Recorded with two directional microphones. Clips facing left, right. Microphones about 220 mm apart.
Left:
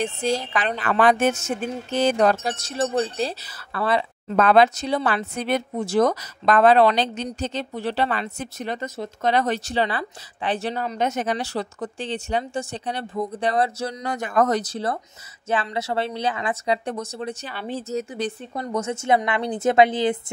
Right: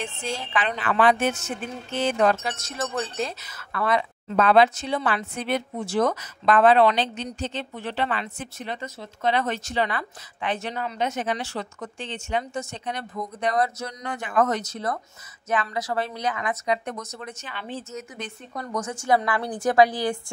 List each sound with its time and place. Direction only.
0.0 s speech: 40° left (ahead or behind)
4.4 s speech: 45° left (ahead or behind); by 20.2 s 20° left (ahead or behind)